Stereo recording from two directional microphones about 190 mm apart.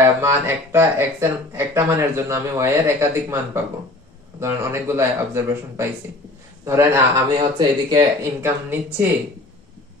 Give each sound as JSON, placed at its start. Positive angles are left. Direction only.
{"t": 0.0, "sound": "speech", "side_deg": -15}